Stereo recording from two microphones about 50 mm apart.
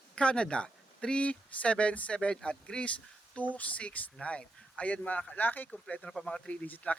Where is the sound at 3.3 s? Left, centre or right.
Left.